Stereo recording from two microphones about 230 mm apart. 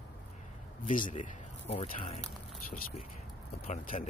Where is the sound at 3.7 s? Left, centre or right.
Left.